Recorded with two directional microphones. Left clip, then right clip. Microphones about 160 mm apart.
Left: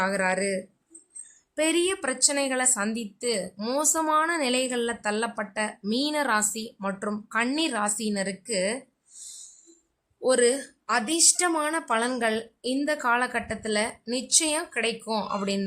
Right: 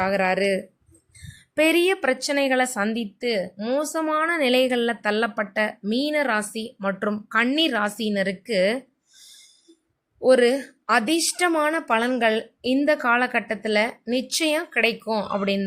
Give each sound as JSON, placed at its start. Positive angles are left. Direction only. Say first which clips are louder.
{"t": 0.0, "sound": "a woman's voice", "louder": "right 4 dB", "side_deg": -20}
{"t": 3.6, "sound": "a woman's voice", "louder": "right 2 dB", "side_deg": -10}
{"t": 5.8, "sound": "a woman's voice", "louder": "right 3 dB", "side_deg": -10}
{"t": 10.2, "sound": "a woman's voice", "louder": "right 5 dB", "side_deg": -20}